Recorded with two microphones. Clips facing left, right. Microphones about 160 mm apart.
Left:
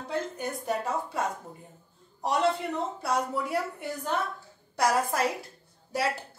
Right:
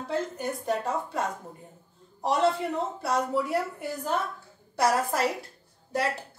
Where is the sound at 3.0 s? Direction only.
Centre (ahead or behind).